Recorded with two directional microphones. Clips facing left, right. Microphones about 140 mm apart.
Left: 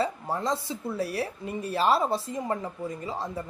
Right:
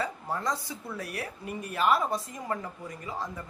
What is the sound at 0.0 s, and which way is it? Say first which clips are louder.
Speech: left 3 dB; 25° left (ahead or behind).